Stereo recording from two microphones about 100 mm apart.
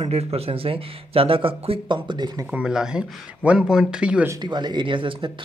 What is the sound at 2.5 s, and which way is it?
Speech, 10° right (ahead or behind).